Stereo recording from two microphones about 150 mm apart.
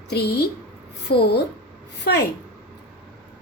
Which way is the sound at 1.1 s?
90° left.